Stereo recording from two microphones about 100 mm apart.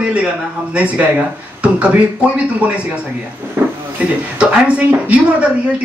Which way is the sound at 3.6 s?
20° right (ahead or behind).